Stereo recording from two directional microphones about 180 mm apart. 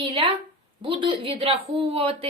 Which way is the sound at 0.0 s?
30° right (ahead or behind).